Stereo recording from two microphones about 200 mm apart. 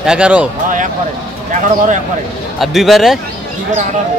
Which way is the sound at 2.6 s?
Centre (ahead or behind).